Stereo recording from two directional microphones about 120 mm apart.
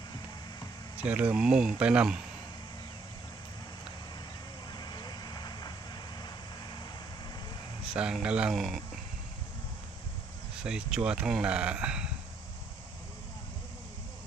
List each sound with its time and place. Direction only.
1.0 s speech: 10° right (ahead or behind)
4.7 s vehicle: 35° left (ahead or behind)
7.9 s speech: 5° right (ahead or behind)
10.6 s speech: 5° right (ahead or behind)